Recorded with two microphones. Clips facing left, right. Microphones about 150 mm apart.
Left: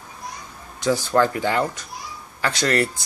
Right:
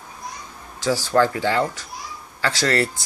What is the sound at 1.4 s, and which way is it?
Speech, 15° left (ahead or behind).